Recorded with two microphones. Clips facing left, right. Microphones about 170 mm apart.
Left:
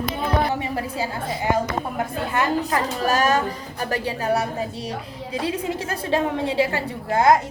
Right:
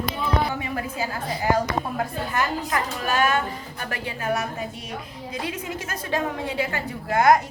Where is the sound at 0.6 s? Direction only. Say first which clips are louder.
Left 2 dB; 30° left (ahead or behind).